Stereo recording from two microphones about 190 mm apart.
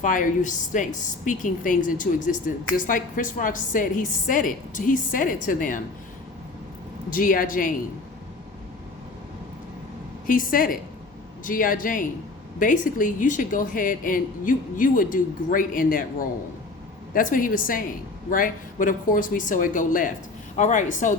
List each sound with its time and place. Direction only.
0.0 s a woman's voice: 45° left (ahead or behind)
7.1 s a woman's voice: 45° left (ahead or behind)
10.2 s a woman's voice: 45° left (ahead or behind)